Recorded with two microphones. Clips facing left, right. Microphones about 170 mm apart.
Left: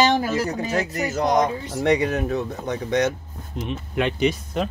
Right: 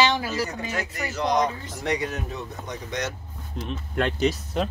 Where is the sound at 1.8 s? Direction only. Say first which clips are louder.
Left 8 dB; 60° left (ahead or behind).